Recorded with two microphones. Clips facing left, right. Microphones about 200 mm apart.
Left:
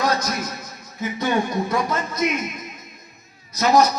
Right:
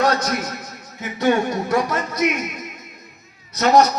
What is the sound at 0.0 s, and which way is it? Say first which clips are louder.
A man's voice: right 3 dB; 75° right (ahead or behind).